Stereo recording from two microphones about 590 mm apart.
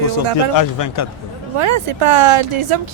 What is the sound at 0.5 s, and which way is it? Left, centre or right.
Speech, left.